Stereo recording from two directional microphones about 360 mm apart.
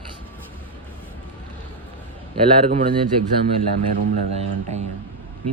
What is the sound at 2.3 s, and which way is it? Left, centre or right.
Speech, centre.